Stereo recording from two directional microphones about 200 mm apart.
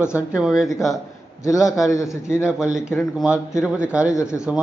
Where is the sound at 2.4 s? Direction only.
5° right (ahead or behind).